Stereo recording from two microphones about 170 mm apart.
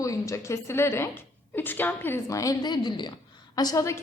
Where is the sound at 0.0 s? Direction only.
20° left (ahead or behind).